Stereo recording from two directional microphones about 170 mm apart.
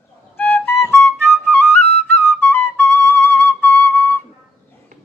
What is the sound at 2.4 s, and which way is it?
Flute, 10° left (ahead or behind).